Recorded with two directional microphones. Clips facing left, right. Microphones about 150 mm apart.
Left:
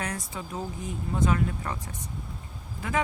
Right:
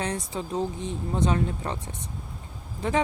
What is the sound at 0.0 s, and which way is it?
Speech, 30° right (ahead or behind).